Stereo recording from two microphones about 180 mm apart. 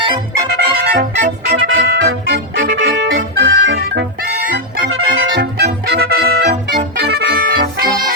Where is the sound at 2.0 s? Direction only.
80° right.